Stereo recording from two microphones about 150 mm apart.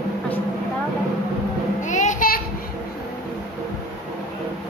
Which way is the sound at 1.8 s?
55° left (ahead or behind).